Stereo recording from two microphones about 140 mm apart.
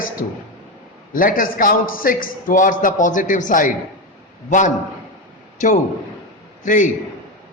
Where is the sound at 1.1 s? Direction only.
90° left; by 3.7 s 70° left (ahead or behind).